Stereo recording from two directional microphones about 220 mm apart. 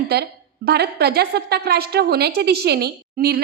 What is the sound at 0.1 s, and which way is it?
A woman's voice, 45° right (ahead or behind).